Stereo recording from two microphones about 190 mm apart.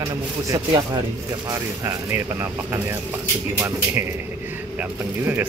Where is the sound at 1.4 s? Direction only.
15° right (ahead or behind).